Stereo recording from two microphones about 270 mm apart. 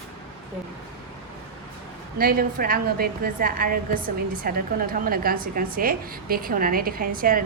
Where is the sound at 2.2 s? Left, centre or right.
Right.